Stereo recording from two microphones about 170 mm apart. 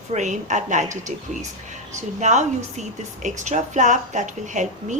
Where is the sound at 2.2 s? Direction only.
45° right (ahead or behind).